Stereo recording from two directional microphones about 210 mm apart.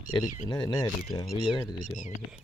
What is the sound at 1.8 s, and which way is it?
Speech, 35° left (ahead or behind).